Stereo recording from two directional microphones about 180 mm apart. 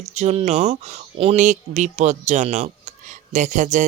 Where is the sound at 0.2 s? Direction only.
35° right (ahead or behind).